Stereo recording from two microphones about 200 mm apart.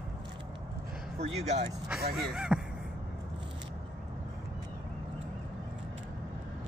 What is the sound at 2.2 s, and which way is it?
Speech, centre (ahead or behind).